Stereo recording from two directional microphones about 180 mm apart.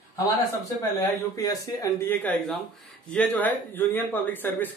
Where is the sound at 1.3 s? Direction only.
20° left (ahead or behind).